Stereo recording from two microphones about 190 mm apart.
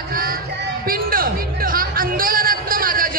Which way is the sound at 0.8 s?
50° right (ahead or behind).